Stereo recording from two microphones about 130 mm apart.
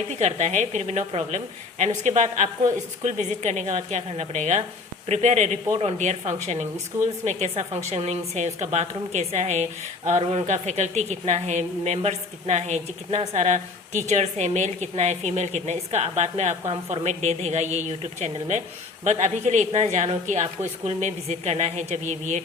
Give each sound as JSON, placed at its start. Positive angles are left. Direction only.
{"t": 0.1, "sound": "a woman's voice", "side_deg": -60}
{"t": 6.9, "sound": "speech", "side_deg": -15}
{"t": 7.3, "sound": "a woman's voice", "side_deg": -60}